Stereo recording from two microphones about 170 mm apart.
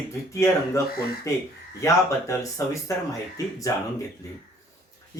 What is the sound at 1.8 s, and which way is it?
Speech, 20° left (ahead or behind).